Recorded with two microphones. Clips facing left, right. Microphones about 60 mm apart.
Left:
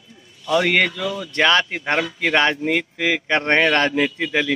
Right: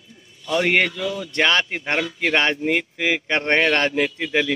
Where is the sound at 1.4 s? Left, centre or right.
Centre.